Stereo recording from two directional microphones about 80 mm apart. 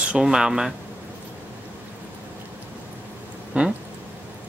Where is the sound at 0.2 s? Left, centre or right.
Centre.